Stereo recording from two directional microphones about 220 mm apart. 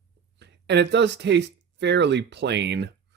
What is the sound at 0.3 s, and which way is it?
Speech, 50° right (ahead or behind).